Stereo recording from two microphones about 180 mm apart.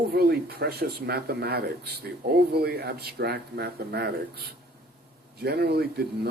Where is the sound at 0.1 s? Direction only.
60° right (ahead or behind).